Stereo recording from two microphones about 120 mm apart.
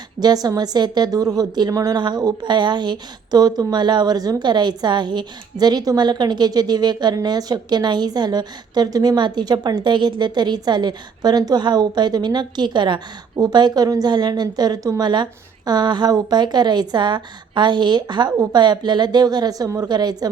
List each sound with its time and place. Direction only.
0.2 s a woman's voice: 35° right (ahead or behind)